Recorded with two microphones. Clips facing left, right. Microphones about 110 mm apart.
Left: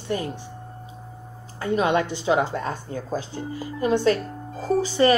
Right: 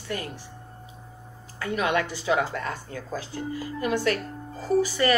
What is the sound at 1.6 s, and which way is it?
A woman's voice, 25° left (ahead or behind).